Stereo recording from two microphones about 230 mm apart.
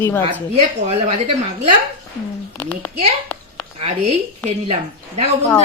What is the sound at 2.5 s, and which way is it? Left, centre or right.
Speech, centre.